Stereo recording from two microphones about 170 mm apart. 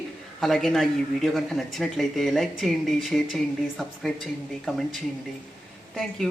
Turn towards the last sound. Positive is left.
turn(degrees=0)  # may be behind; listen again after turning